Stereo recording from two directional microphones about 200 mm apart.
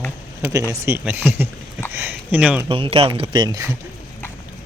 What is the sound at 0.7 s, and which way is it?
Speech, 10° right (ahead or behind).